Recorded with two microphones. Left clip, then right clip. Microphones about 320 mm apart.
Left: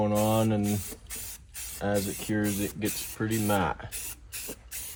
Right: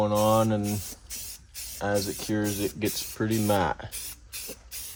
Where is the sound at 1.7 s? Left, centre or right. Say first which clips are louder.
Right 2 dB; centre.